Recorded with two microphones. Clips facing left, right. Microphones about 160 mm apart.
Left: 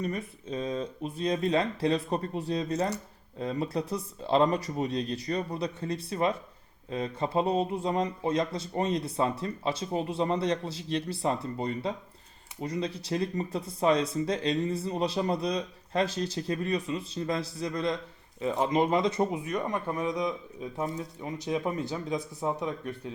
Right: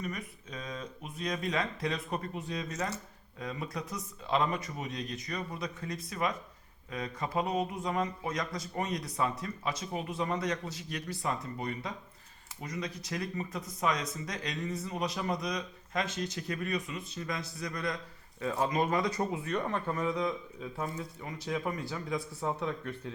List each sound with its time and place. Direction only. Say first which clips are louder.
0.0 s speech: left 6 dB; 30° left (ahead or behind); by 23.1 s 15° left (ahead or behind)